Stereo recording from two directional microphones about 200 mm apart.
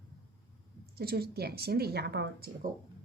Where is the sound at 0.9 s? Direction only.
50° right (ahead or behind).